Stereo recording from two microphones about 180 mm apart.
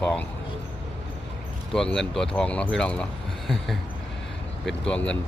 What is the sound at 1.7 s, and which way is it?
Speech, 5° left (ahead or behind).